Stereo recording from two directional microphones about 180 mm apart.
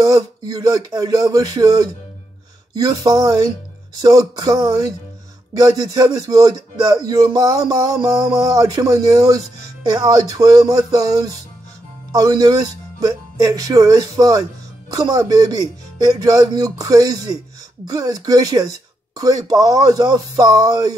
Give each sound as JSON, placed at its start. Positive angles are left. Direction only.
{"t": 0.0, "sound": "speech", "side_deg": -20}